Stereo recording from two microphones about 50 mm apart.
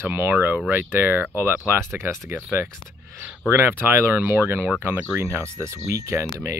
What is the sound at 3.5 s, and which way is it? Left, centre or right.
Speech, right.